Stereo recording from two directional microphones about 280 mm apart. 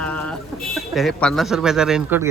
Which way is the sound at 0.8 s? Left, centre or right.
Centre.